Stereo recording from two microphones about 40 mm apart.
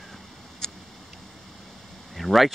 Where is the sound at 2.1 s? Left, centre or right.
Centre.